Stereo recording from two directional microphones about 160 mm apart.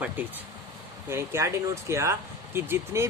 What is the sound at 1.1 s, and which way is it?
Speech, 15° right (ahead or behind).